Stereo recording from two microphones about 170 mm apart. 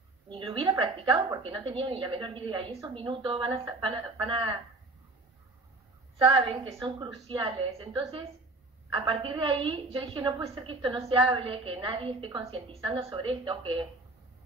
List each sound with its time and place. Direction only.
0.3 s a sound: 30° right (ahead or behind)
1.4 s a woman's voice: 30° right (ahead or behind)
6.2 s a woman's voice: 30° right (ahead or behind)